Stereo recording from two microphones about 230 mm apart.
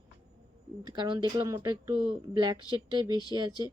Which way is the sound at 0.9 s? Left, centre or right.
Centre.